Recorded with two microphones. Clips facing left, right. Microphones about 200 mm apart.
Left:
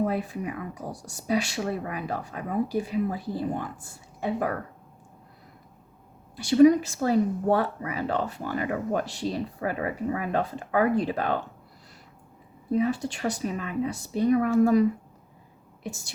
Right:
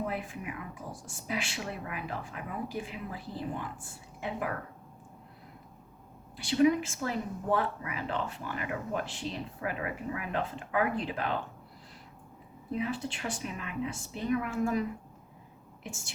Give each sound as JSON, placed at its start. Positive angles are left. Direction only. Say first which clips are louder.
{"t": 0.0, "sound": "speech", "louder": "left 8 dB", "side_deg": 40}
{"t": 6.3, "sound": "speech", "louder": "left 8 dB", "side_deg": 40}
{"t": 12.7, "sound": "speech", "louder": "left 8 dB", "side_deg": 40}